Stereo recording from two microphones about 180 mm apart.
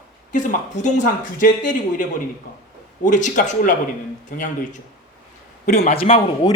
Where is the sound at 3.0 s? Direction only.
45° left (ahead or behind).